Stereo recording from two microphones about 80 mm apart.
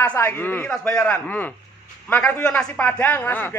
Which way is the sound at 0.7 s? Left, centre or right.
Centre.